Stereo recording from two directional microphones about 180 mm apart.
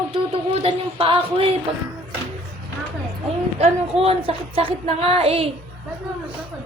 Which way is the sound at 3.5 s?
35° right (ahead or behind).